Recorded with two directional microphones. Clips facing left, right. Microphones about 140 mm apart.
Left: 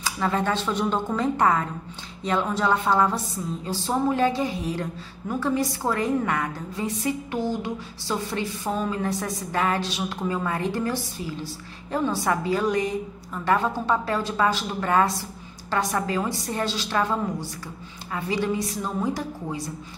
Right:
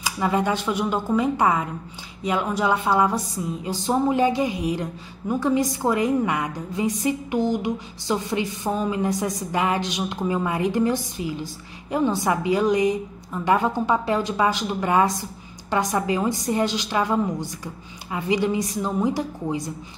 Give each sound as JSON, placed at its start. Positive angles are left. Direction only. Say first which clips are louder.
{"t": 0.0, "sound": "a woman's voice", "louder": "right 2 dB", "side_deg": -15}